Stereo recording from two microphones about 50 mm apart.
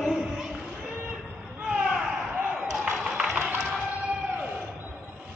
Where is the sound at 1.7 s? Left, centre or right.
Centre.